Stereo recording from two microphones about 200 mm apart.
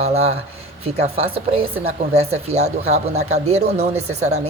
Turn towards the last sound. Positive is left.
turn(degrees=-35)  # may be behind; listen again after turning